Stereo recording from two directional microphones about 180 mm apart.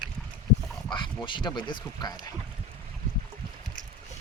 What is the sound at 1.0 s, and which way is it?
Speech, 25° left (ahead or behind).